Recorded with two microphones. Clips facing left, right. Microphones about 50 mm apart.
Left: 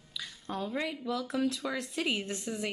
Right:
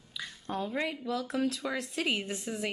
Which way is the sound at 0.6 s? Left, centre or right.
Centre.